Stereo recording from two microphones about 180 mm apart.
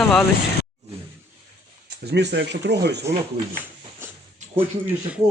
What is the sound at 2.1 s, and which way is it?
Speech, 70° right (ahead or behind).